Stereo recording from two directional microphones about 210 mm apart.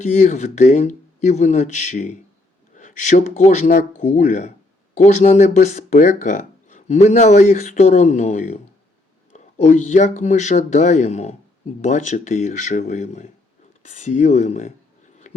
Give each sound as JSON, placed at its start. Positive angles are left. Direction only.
{"t": 0.0, "sound": "speech", "side_deg": 35}